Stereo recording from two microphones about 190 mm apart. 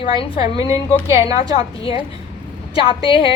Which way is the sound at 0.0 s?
30° left (ahead or behind).